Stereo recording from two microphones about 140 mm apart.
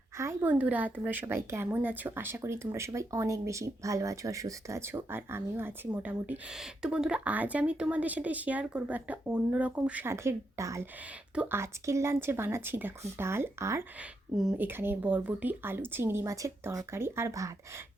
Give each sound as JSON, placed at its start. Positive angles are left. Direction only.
{"t": 0.2, "sound": "speech", "side_deg": -15}
{"t": 14.0, "sound": "speech", "side_deg": -5}
{"t": 14.6, "sound": "speech", "side_deg": -15}